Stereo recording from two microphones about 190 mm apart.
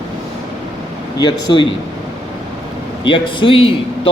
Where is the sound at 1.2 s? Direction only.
25° left (ahead or behind).